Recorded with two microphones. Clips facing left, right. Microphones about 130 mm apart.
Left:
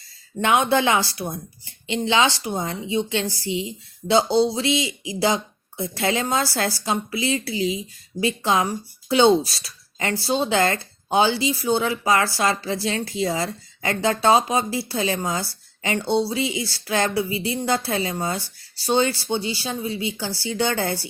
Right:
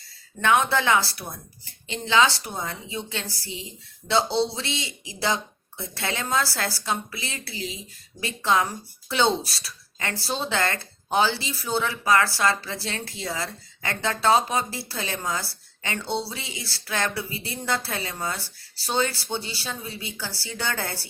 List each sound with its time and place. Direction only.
0.4 s a woman's voice: 20° left (ahead or behind)